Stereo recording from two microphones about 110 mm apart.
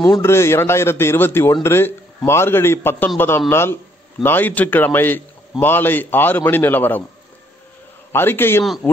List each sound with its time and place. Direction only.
0.2 s a man's voice: 25° left (ahead or behind)
8.1 s a man's voice: 20° left (ahead or behind)